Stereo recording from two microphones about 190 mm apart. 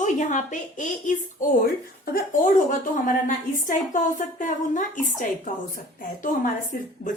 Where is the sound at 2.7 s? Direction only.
45° left (ahead or behind).